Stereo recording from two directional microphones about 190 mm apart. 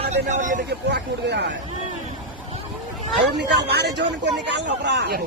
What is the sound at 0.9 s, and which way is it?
Speech, 65° right (ahead or behind).